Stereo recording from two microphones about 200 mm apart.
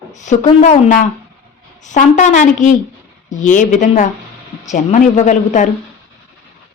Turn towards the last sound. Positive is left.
turn(degrees=40)  # may be behind; listen again after turning